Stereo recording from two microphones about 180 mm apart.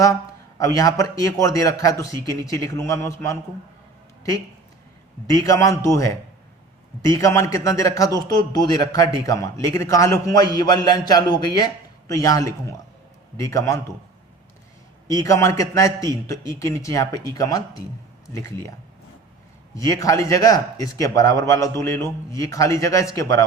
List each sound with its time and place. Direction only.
0.6 s a man's voice: 20° left (ahead or behind)
5.2 s a man's voice: 20° left (ahead or behind)
15.1 s a man's voice: 20° left (ahead or behind)
19.7 s speech: 20° left (ahead or behind)